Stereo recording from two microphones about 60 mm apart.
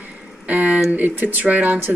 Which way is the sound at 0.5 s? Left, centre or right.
Right.